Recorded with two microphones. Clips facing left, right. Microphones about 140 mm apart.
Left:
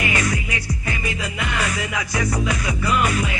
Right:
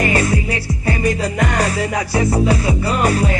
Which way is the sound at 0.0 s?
35° right (ahead or behind).